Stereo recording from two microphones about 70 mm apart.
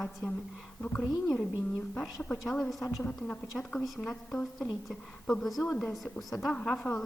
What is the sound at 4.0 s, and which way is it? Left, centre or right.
A woman's voice, centre.